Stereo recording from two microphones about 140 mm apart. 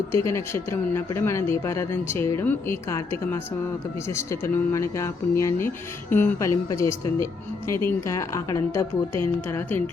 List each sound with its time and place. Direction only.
0.1 s a woman's voice: 20° left (ahead or behind)